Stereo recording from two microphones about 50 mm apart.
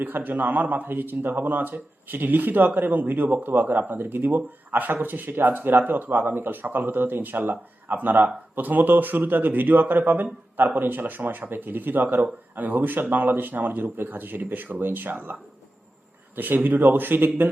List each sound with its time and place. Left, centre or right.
0.0 s a man's voice: right